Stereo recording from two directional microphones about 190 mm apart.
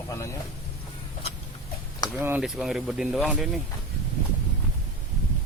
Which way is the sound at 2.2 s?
5° right (ahead or behind).